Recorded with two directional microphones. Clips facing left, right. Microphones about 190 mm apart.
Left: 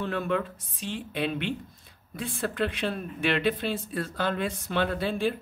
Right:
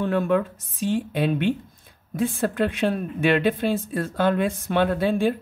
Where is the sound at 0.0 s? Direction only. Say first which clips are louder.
Right 7 dB; 50° right (ahead or behind).